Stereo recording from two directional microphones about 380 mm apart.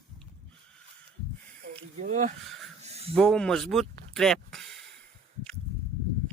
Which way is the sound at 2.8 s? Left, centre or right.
Centre.